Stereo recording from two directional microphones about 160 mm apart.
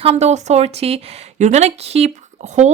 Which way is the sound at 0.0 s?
40° right (ahead or behind).